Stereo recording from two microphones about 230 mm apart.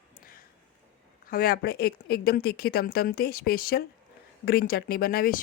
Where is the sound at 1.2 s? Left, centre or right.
Left.